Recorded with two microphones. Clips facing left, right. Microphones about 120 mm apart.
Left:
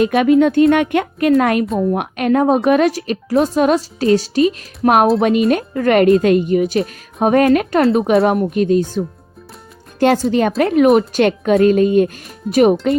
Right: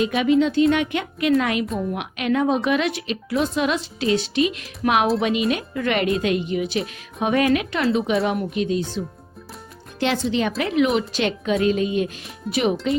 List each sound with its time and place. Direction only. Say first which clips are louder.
0.0 s a woman's voice: left 6 dB; 55° left (ahead or behind)
10.0 s a woman's voice: left 8 dB; 45° left (ahead or behind)